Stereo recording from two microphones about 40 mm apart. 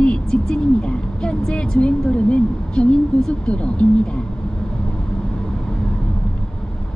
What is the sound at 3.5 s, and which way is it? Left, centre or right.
Speech, left.